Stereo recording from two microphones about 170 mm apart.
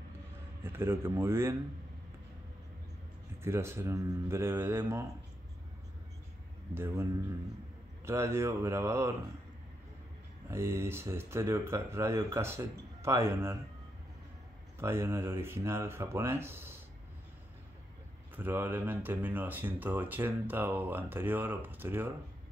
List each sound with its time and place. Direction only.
0.7 s speech: 15° right (ahead or behind)
3.4 s speech: 15° right (ahead or behind)
6.7 s speech: 15° right (ahead or behind)
10.5 s speech: 15° right (ahead or behind)
14.8 s speech: 15° right (ahead or behind)
18.3 s speech: 10° right (ahead or behind)